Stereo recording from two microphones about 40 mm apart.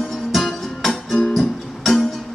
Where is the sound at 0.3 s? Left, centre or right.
Centre.